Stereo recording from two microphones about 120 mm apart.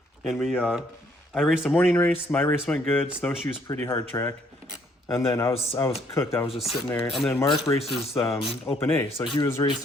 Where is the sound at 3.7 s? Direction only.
30° left (ahead or behind).